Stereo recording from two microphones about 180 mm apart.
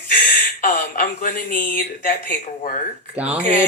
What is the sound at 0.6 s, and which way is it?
Speech, 50° left (ahead or behind).